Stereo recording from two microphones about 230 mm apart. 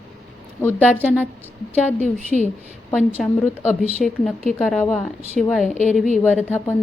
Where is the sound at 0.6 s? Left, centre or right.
Centre.